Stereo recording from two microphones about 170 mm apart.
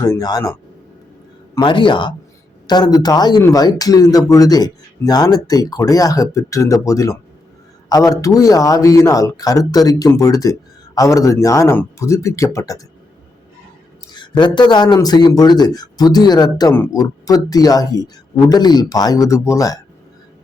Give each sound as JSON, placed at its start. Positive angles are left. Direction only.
{"t": 0.0, "sound": "speech", "side_deg": 20}
{"t": 14.1, "sound": "speech", "side_deg": 25}